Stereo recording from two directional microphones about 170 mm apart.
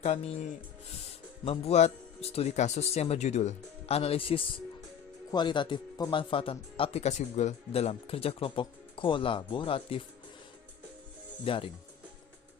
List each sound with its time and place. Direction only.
0.0 s speech: 40° left (ahead or behind)
1.5 s speech: 40° left (ahead or behind)
11.4 s speech: 30° left (ahead or behind)